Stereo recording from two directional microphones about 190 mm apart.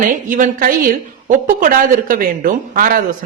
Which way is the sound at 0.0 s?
45° right (ahead or behind).